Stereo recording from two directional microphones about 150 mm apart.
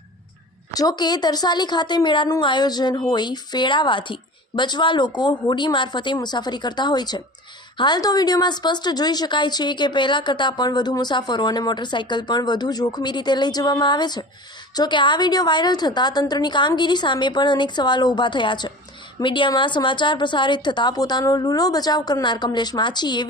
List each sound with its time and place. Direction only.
0.7 s a woman's voice: 25° left (ahead or behind)